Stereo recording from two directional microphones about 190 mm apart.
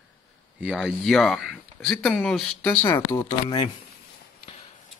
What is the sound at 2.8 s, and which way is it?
Speech, 20° left (ahead or behind).